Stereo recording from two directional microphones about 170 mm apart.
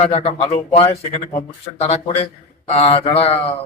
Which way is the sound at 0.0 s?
35° left (ahead or behind).